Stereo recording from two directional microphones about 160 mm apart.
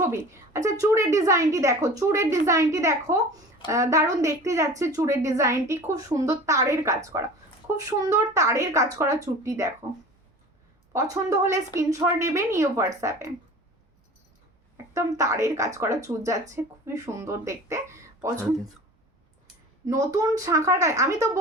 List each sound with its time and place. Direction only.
0.0 s a woman's voice: 15° right (ahead or behind)
10.9 s a woman's voice: 20° right (ahead or behind)
14.9 s a woman's voice: 20° right (ahead or behind)
19.9 s a woman's voice: 25° right (ahead or behind)